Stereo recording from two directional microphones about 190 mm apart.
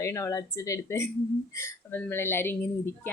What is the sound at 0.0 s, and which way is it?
A woman's voice, 15° left (ahead or behind).